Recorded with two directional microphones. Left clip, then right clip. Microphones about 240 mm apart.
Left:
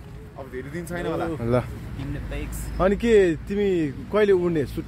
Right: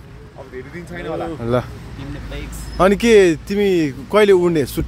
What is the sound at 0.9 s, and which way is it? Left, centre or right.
Speech, left.